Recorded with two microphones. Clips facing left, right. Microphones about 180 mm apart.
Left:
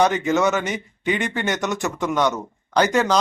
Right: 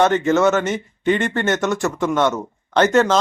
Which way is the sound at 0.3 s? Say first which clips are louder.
Right 4 dB; centre (ahead or behind).